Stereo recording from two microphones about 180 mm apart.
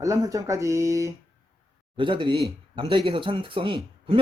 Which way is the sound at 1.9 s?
25° right (ahead or behind).